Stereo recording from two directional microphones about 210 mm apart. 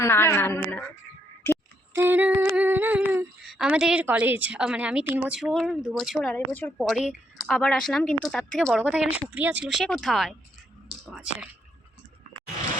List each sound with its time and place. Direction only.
0.0 s a woman's voice: 10° left (ahead or behind)
1.9 s humming: 10° right (ahead or behind)
6.3 s a woman's voice: 10° left (ahead or behind)
10.8 s whispering: 5° right (ahead or behind)